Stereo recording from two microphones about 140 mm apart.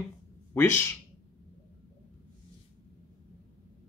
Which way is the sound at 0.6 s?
15° left (ahead or behind).